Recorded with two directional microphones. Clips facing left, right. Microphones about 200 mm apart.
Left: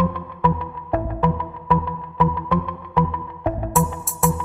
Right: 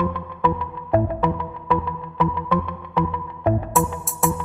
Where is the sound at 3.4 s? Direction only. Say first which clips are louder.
Right 1 dB; centre (ahead or behind).